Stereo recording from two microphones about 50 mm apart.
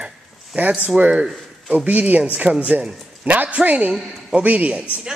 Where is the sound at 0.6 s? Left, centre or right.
Right.